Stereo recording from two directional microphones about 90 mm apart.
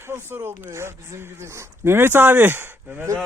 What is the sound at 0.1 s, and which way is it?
A man's voice, 25° right (ahead or behind).